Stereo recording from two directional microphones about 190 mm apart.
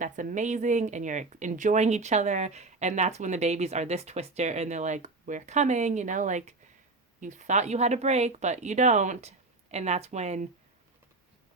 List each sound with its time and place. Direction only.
0.0 s speech: 45° right (ahead or behind)